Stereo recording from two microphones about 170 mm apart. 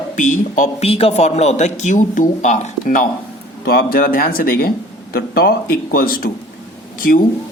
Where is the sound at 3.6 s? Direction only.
65° left (ahead or behind).